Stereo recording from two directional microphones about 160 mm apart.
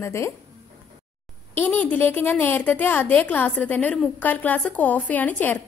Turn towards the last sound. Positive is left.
turn(degrees=10)  # may be behind; listen again after turning